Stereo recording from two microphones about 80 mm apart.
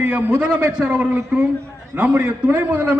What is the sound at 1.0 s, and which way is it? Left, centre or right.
A man's voice, centre.